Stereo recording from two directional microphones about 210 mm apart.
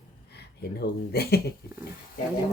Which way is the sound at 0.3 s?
50° left (ahead or behind).